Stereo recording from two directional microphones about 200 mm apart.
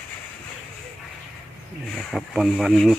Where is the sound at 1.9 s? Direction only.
Centre (ahead or behind).